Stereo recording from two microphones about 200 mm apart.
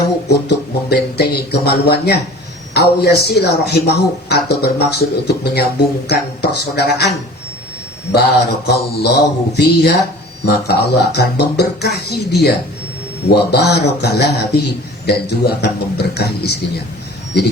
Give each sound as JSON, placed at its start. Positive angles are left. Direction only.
{"t": 0.3, "sound": "a man's voice", "side_deg": 55}
{"t": 8.1, "sound": "a man's voice", "side_deg": 55}